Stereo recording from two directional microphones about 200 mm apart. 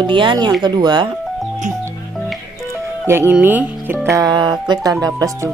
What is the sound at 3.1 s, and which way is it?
Speech, 10° right (ahead or behind).